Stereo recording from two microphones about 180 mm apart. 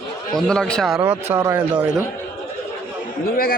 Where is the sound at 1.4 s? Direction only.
10° right (ahead or behind).